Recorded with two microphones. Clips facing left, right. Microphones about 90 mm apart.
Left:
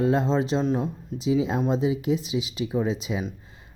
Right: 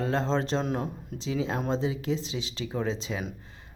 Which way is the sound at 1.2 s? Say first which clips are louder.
Left 6 dB; 15° left (ahead or behind).